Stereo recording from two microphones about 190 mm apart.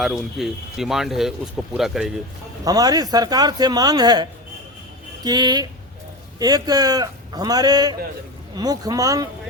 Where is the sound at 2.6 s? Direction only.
20° right (ahead or behind).